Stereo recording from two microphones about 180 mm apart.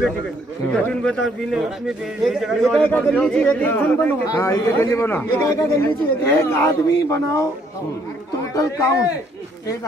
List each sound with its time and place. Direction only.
0.8 s a man's voice: centre (ahead or behind)
8.5 s a man's voice: 20° left (ahead or behind)